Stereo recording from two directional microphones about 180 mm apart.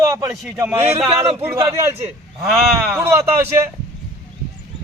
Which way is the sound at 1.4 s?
15° right (ahead or behind).